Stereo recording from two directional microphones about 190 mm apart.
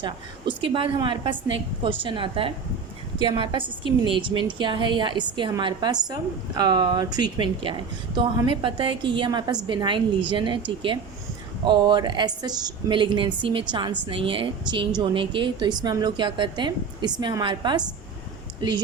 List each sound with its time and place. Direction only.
0.0 s a woman's voice: 25° right (ahead or behind)
11.6 s a woman's voice: 25° right (ahead or behind)